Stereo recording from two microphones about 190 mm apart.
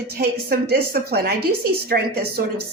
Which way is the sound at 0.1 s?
55° right (ahead or behind).